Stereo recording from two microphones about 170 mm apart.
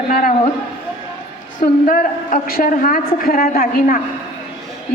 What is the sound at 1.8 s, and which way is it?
A woman's voice, 50° left (ahead or behind).